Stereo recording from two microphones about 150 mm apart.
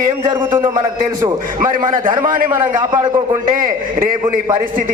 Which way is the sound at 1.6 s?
65° right (ahead or behind).